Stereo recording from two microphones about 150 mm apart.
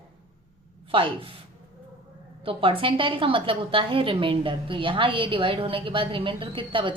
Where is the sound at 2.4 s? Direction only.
35° right (ahead or behind).